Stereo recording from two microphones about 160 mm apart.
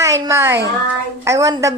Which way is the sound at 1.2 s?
20° right (ahead or behind).